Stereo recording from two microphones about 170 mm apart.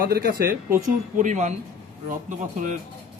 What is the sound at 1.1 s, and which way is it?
A man's voice, 45° right (ahead or behind).